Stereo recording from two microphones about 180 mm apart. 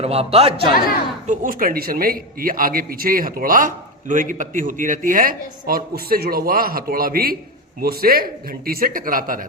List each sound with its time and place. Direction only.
0.0 s speech: 35° right (ahead or behind)
1.3 s a man's voice: 50° right (ahead or behind)